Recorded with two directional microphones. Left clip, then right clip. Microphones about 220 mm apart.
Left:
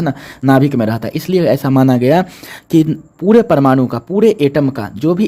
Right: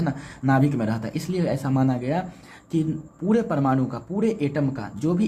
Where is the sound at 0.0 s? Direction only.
45° left (ahead or behind).